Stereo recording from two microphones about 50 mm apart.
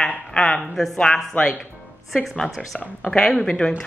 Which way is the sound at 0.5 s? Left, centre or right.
Centre.